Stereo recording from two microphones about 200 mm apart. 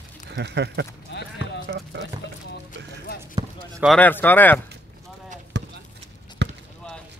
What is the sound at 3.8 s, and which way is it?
Speech, 5° left (ahead or behind).